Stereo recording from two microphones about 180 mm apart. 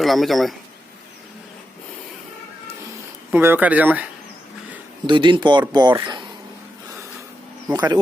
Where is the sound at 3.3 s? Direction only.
10° right (ahead or behind).